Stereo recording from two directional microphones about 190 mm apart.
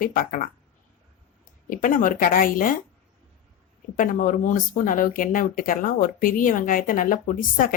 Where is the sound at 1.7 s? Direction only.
45° left (ahead or behind).